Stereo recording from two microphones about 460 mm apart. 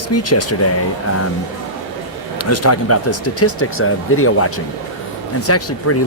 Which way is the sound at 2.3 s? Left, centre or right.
Left.